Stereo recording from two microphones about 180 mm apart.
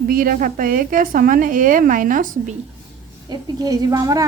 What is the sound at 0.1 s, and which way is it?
A woman's voice, 55° right (ahead or behind).